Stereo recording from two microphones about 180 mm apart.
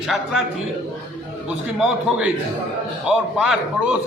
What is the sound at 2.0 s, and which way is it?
A man's voice, 5° right (ahead or behind).